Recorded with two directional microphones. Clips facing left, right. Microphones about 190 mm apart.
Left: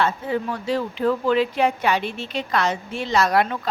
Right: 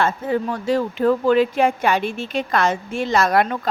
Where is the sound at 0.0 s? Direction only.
50° right (ahead or behind).